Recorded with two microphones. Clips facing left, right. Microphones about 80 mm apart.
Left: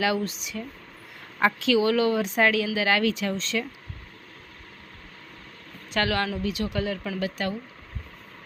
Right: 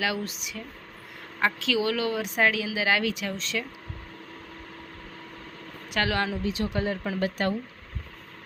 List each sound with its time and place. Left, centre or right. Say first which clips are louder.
0.0 s a woman's voice: left 4 dB; centre
5.9 s speech: left 1 dB; centre; by 7.5 s right